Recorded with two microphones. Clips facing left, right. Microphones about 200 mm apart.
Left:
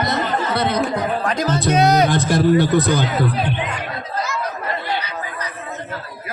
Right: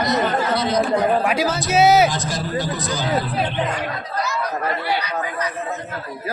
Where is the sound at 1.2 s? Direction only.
5° right (ahead or behind).